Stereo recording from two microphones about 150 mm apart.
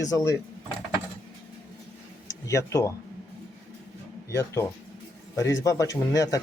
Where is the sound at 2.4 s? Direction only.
20° left (ahead or behind).